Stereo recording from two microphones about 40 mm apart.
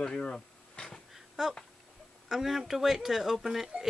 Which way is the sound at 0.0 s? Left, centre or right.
Left.